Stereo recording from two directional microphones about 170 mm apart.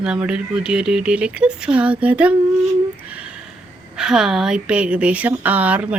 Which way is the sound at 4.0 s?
5° right (ahead or behind).